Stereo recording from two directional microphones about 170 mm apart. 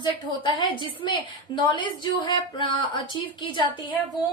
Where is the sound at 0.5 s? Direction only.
30° left (ahead or behind).